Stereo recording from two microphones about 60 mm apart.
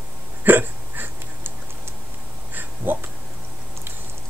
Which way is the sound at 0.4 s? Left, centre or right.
Right.